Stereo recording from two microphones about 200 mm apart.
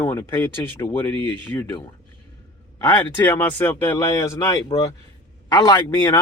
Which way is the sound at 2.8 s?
10° left (ahead or behind).